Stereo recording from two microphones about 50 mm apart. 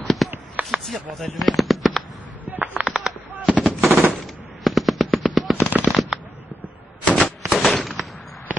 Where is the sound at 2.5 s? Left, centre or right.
Right.